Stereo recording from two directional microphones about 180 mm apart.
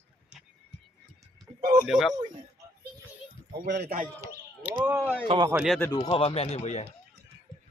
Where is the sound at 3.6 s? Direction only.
65° right (ahead or behind).